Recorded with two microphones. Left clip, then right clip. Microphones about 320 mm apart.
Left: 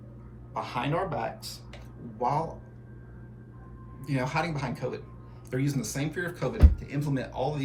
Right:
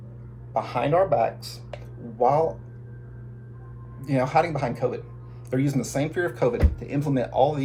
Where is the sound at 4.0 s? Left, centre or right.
Centre.